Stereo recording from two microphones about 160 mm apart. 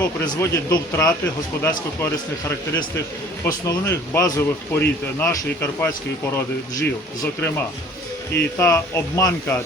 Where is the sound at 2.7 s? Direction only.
20° left (ahead or behind).